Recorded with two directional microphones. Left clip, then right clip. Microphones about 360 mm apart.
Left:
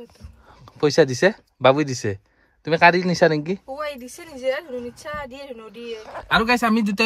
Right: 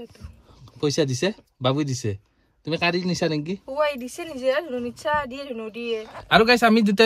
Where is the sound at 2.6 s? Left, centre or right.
Centre.